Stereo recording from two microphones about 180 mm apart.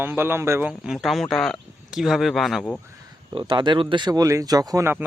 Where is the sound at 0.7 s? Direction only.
5° right (ahead or behind).